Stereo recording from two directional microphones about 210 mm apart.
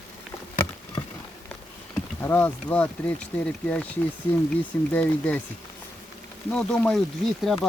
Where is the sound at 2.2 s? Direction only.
10° left (ahead or behind).